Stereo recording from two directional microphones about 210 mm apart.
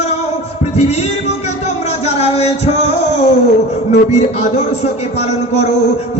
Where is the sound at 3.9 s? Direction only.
30° left (ahead or behind).